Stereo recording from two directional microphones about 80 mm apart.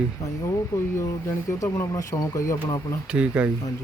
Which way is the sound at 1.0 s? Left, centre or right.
Left.